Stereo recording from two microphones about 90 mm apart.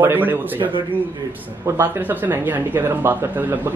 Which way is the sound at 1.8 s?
20° right (ahead or behind).